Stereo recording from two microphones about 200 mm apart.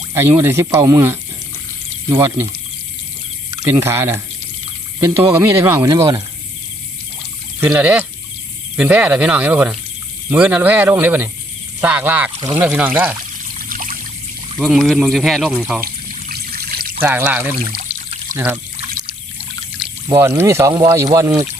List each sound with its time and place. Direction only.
0.1 s speech: 15° right (ahead or behind)
3.6 s speech: 10° right (ahead or behind)
7.6 s speech: 5° right (ahead or behind)
12.4 s speech: 25° right (ahead or behind)
12.6 s speech: 5° right (ahead or behind)
13.6 s trickle: 45° right (ahead or behind)
14.6 s speech: centre (ahead or behind)
16.3 s trickle: 50° right (ahead or behind)
17.0 s speech: 10° right (ahead or behind)
20.1 s speech: 15° right (ahead or behind)